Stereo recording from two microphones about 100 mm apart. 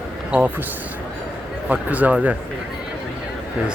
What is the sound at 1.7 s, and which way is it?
Speech, 15° right (ahead or behind).